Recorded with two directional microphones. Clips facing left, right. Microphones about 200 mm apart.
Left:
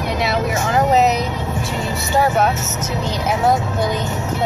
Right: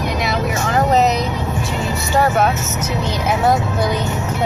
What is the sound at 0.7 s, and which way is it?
Vehicle, 10° left (ahead or behind).